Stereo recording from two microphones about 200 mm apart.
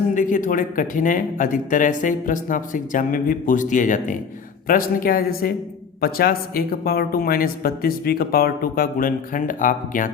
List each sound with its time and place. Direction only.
0.1 s speech: 40° left (ahead or behind)